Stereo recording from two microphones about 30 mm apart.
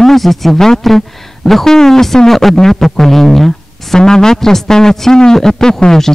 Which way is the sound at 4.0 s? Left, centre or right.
Left.